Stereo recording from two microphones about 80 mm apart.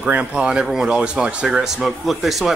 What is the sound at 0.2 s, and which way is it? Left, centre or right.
Speech, centre.